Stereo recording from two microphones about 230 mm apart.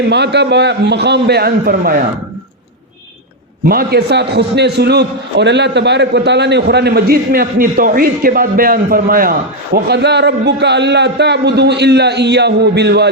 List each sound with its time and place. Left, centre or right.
0.1 s a man's voice: right
3.7 s a man's voice: right